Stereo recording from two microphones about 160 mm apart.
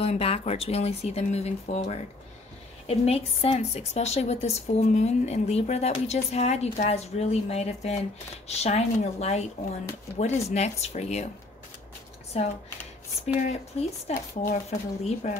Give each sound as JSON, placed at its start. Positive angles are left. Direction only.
{"t": 0.0, "sound": "speech", "side_deg": 40}
{"t": 12.3, "sound": "speech", "side_deg": 40}